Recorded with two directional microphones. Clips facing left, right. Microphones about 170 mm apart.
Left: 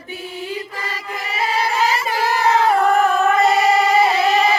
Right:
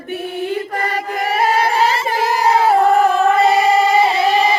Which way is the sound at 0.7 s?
55° right (ahead or behind).